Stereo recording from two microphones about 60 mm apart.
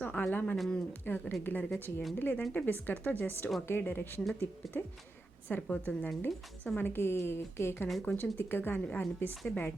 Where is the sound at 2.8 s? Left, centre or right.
Left.